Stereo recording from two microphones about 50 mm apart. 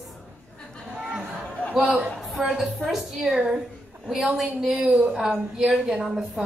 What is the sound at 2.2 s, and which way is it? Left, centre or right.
A woman's voice, centre.